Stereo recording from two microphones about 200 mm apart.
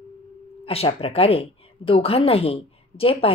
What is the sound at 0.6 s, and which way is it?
A woman's voice, 30° left (ahead or behind).